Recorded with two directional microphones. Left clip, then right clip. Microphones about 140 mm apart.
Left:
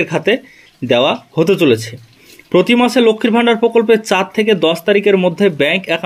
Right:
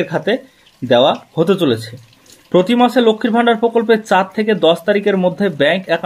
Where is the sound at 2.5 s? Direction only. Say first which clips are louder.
Left 1 dB; 35° left (ahead or behind).